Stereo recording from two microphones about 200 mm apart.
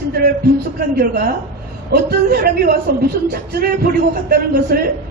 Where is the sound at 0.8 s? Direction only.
50° right (ahead or behind).